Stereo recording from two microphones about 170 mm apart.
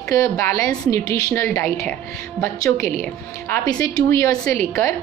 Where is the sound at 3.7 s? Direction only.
20° left (ahead or behind).